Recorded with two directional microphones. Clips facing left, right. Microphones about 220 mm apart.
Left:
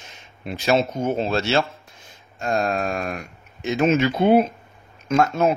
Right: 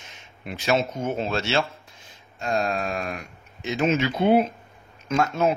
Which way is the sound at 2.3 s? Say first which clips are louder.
Left 3 dB; 45° left (ahead or behind).